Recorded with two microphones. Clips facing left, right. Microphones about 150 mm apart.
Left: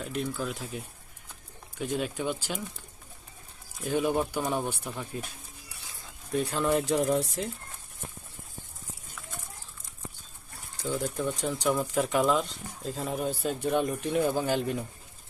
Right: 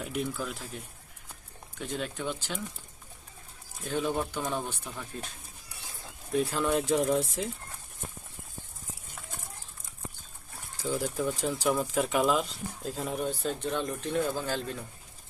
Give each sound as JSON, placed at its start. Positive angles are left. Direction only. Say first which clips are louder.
{"t": 0.0, "sound": "speech", "louder": "left 1 dB", "side_deg": -5}
{"t": 1.8, "sound": "speech", "louder": "left 4 dB", "side_deg": 10}
{"t": 3.8, "sound": "speech", "louder": "left 3 dB", "side_deg": 15}
{"t": 6.3, "sound": "speech", "louder": "left 1 dB", "side_deg": 0}
{"t": 10.8, "sound": "speech", "louder": "even", "side_deg": -5}